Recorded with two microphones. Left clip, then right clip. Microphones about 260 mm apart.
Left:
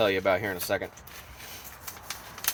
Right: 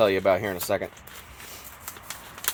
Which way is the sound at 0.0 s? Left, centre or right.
Right.